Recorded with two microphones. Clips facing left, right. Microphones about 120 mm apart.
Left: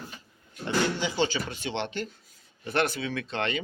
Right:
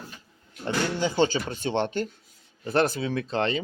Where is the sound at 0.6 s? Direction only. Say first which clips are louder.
Right 1 dB; 45° right (ahead or behind).